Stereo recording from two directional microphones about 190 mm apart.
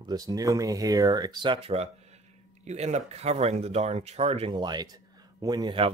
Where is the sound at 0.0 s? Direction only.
20° right (ahead or behind).